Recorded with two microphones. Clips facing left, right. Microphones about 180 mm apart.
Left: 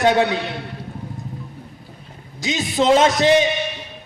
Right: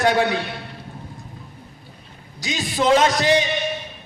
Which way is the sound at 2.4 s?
25° left (ahead or behind).